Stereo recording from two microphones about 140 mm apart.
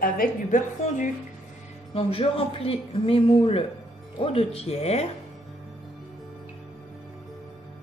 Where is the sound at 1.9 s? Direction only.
45° left (ahead or behind).